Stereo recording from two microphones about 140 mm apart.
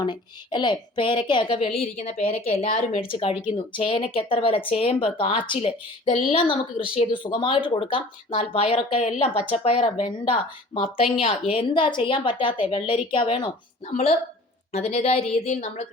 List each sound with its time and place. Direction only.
0.0 s a woman's voice: 30° left (ahead or behind)
1.8 s a woman's voice: 50° left (ahead or behind); by 13.5 s 35° left (ahead or behind)
13.9 s a woman's voice: 45° left (ahead or behind)